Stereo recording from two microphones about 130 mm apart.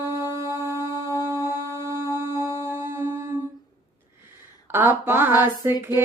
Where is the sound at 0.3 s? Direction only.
30° left (ahead or behind).